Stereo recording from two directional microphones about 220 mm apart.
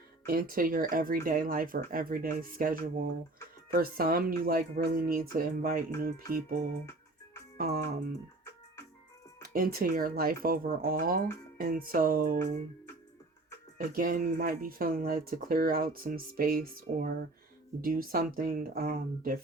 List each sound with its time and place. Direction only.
0.3 s speech: 40° right (ahead or behind)
9.4 s speech: 45° right (ahead or behind)
13.7 s speech: 40° right (ahead or behind)